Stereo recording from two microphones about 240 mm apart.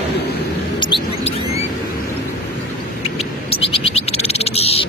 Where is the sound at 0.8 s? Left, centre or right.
Left.